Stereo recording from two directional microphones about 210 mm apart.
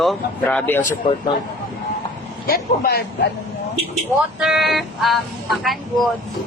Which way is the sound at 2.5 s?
50° left (ahead or behind).